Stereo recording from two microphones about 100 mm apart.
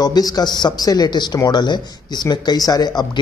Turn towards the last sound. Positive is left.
turn(degrees=45)  # may be behind; listen again after turning